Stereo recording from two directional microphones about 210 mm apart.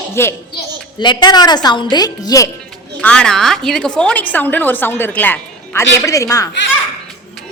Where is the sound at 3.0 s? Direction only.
5° left (ahead or behind).